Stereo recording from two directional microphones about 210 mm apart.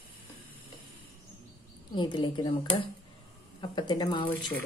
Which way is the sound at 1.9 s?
20° left (ahead or behind).